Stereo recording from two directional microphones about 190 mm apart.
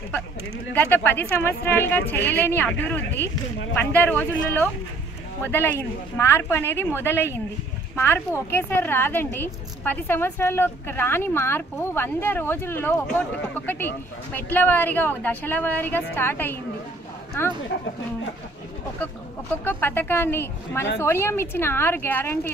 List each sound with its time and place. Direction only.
0.7 s speech: 10° left (ahead or behind)
19.6 s speech: 10° left (ahead or behind)